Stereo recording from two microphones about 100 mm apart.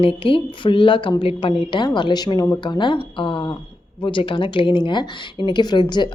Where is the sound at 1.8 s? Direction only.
45° left (ahead or behind).